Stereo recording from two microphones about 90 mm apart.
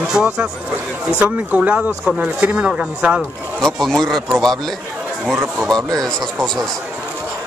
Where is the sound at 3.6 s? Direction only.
5° left (ahead or behind).